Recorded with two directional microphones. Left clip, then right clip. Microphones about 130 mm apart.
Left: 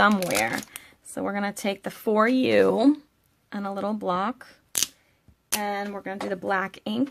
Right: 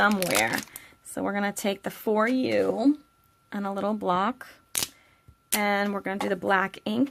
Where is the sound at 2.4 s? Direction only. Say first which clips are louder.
Left 5 dB; 35° left (ahead or behind).